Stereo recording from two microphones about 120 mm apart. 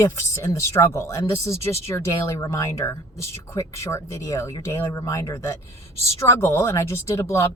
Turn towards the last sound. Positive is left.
turn(degrees=25)  # may be behind; listen again after turning